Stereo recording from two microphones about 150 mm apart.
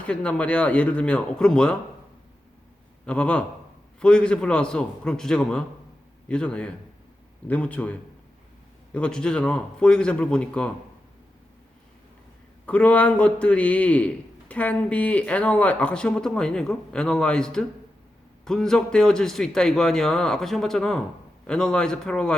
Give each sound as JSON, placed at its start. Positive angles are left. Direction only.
{"t": 0.0, "sound": "a man's voice", "side_deg": 10}
{"t": 3.1, "sound": "a man's voice", "side_deg": 10}
{"t": 12.6, "sound": "a man's voice", "side_deg": 10}